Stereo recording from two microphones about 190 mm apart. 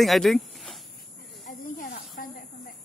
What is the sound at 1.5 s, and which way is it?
Snake, 45° left (ahead or behind).